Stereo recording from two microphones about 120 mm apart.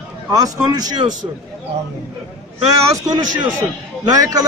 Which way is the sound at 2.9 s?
30° right (ahead or behind).